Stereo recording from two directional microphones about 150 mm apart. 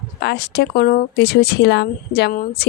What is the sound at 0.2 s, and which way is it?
Speech, 90° left.